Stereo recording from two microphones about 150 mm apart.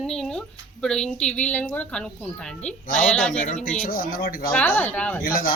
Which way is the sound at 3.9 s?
75° left (ahead or behind).